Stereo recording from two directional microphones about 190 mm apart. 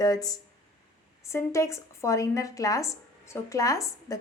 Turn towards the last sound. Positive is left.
turn(degrees=15)  # may be behind; listen again after turning